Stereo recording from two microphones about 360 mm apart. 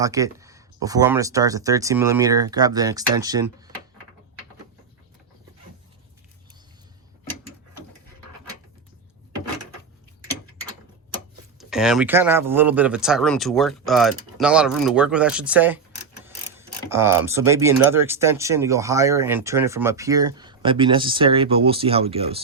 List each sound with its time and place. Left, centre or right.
0.0 s speech: centre
11.5 s speech: centre
16.9 s speech: centre